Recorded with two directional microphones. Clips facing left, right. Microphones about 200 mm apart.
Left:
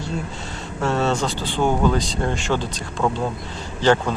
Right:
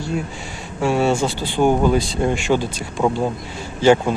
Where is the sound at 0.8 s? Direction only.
15° right (ahead or behind).